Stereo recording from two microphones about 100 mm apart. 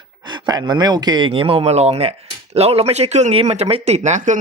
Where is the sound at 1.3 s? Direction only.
70° right (ahead or behind); by 4.0 s 90° right.